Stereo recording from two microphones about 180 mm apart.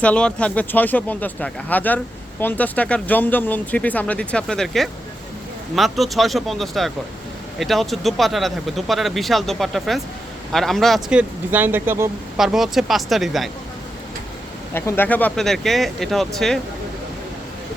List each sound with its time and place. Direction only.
0.0 s speech: 5° left (ahead or behind); by 12.1 s 15° right (ahead or behind)
12.4 s speech: centre (ahead or behind)
14.7 s speech: 15° left (ahead or behind)